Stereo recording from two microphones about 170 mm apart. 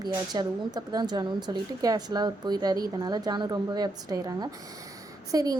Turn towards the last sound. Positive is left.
turn(degrees=-20)  # may be behind; listen again after turning